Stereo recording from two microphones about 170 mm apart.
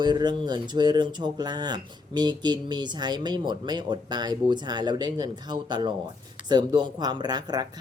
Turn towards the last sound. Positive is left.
turn(degrees=-25)  # may be behind; listen again after turning